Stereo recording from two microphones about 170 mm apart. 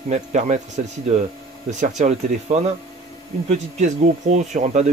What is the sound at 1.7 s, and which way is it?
Speech, 45° right (ahead or behind).